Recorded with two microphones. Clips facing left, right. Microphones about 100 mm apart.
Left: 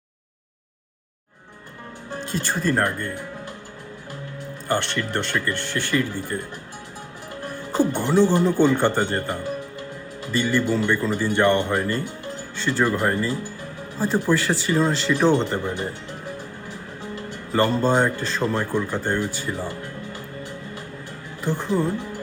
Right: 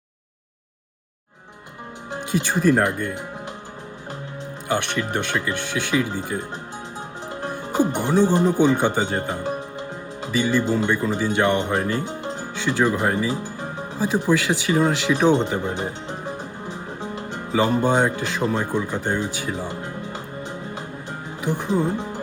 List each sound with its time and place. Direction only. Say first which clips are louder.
2.0 s speech: right 3 dB; 15° right (ahead or behind)
4.7 s speech: right 1 dB; 15° right (ahead or behind)
7.4 s speech: right 1 dB; 15° right (ahead or behind)
19.4 s music: right 1 dB; 15° right (ahead or behind)